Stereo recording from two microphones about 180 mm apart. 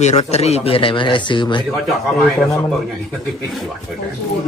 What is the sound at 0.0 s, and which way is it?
Speech, 40° left (ahead or behind).